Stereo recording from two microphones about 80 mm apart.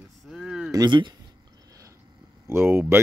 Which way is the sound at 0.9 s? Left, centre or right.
Right.